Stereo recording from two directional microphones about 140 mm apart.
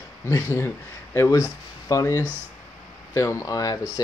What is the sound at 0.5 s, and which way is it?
Speech, 20° left (ahead or behind).